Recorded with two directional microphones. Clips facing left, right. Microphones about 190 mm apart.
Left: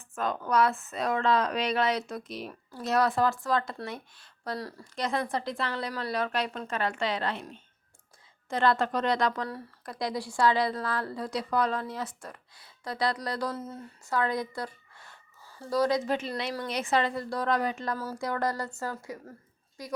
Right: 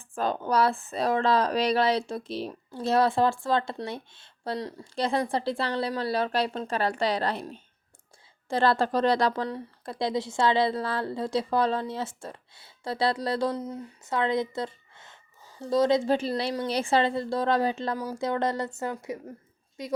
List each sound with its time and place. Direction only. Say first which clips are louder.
0.1 s speech: right 2 dB; 30° right (ahead or behind)
17.9 s speech: right 4 dB; 15° right (ahead or behind)